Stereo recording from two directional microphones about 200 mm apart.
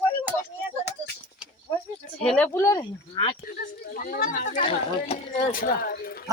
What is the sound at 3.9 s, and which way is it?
Speech, 45° left (ahead or behind).